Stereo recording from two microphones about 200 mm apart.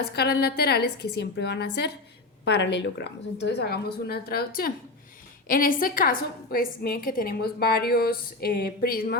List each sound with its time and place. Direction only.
0.0 s a woman's voice: 55° left (ahead or behind)